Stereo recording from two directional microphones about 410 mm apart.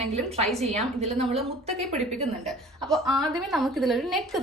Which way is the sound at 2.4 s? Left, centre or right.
Centre.